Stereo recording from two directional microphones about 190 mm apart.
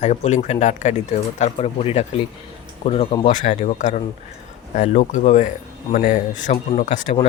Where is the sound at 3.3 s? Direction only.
40° left (ahead or behind).